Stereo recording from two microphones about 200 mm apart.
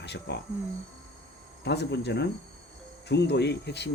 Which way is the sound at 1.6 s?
55° left (ahead or behind).